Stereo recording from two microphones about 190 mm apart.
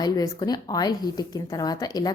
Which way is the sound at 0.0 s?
20° left (ahead or behind).